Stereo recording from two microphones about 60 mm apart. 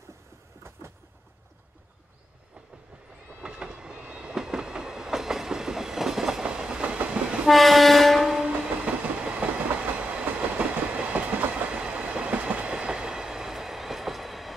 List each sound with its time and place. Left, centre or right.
3.3 s train: centre
7.4 s train: centre
8.8 s train: centre